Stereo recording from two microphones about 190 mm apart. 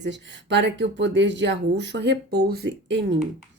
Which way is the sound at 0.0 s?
70° right (ahead or behind).